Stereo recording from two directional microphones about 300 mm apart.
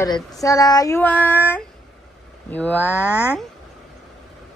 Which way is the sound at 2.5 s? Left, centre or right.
Centre.